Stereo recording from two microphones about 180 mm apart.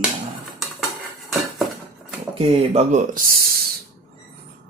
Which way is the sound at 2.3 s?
35° right (ahead or behind).